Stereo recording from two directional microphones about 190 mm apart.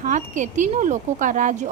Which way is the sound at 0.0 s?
40° right (ahead or behind).